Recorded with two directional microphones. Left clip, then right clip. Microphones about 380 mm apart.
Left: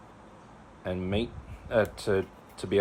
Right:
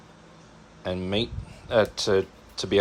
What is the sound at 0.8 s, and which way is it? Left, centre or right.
Speech, centre.